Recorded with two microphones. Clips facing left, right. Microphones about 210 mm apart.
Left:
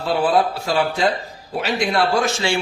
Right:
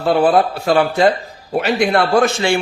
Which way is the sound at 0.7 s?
60° right (ahead or behind).